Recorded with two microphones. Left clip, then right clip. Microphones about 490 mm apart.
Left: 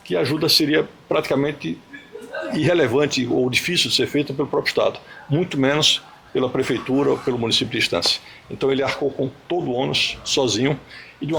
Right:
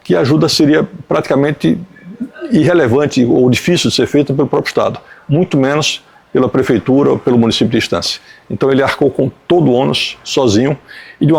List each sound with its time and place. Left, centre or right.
0.1 s speech: right
2.5 s speech: right